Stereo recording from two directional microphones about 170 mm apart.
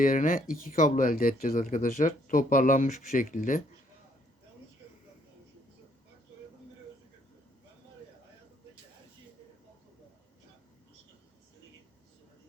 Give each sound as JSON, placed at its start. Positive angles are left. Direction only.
{"t": 0.0, "sound": "speech", "side_deg": 55}